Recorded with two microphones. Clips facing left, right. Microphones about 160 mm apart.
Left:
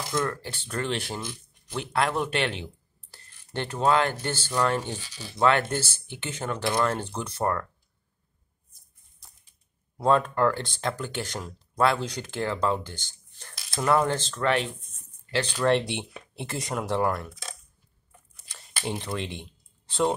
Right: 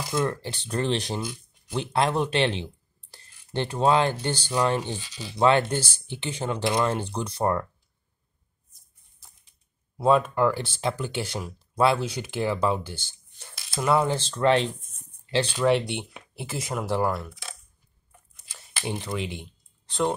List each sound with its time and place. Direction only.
0.1 s speech: 20° right (ahead or behind)
9.9 s speech: 5° right (ahead or behind)
14.4 s speech: 25° right (ahead or behind)
15.6 s speech: 5° right (ahead or behind)
18.5 s speech: 5° right (ahead or behind)